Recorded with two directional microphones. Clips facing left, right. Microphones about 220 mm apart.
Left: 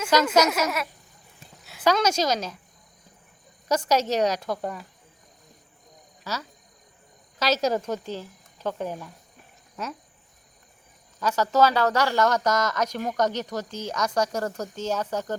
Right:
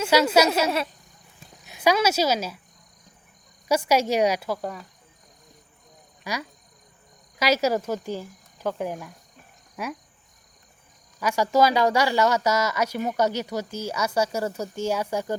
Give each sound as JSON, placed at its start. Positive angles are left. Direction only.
{"t": 0.1, "sound": "speech", "side_deg": -10}
{"t": 0.4, "sound": "a woman's voice", "side_deg": -30}
{"t": 1.6, "sound": "speech", "side_deg": -15}
{"t": 3.7, "sound": "speech", "side_deg": -10}
{"t": 6.3, "sound": "speech", "side_deg": -15}
{"t": 11.2, "sound": "speech", "side_deg": -10}